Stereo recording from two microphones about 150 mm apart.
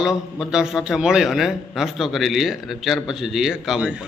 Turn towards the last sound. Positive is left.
turn(degrees=-5)  # may be behind; listen again after turning